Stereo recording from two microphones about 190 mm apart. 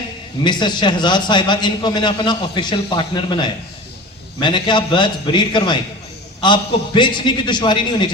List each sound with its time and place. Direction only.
0.4 s a man's voice: 25° left (ahead or behind)